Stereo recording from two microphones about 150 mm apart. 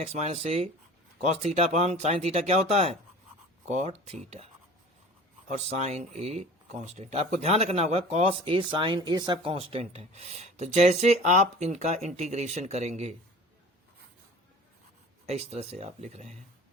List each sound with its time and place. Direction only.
0.0 s speech: 45° right (ahead or behind)
5.6 s speech: 45° right (ahead or behind)
15.3 s speech: 45° right (ahead or behind)